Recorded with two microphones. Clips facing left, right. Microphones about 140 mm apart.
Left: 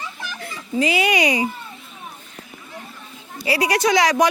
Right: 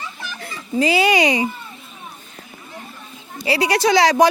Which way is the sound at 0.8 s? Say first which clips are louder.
Right 3 dB; 35° right (ahead or behind).